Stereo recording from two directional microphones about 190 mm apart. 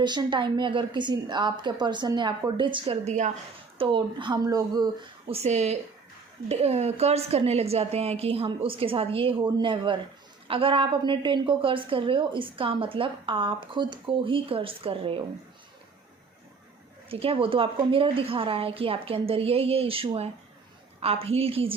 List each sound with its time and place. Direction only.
0.0 s a woman's voice: 25° right (ahead or behind)
3.8 s a woman's voice: 25° right (ahead or behind)
5.3 s a woman's voice: 35° right (ahead or behind)
17.1 s a woman's voice: 30° right (ahead or behind)